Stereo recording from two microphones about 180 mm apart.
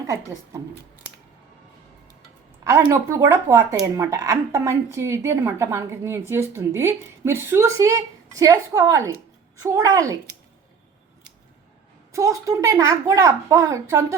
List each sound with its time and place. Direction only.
0.0 s a woman's voice: 15° right (ahead or behind)
2.9 s a woman's voice: 15° right (ahead or behind)
12.1 s a woman's voice: 20° right (ahead or behind)